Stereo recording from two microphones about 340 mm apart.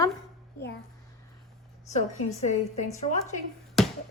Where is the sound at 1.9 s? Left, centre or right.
Centre.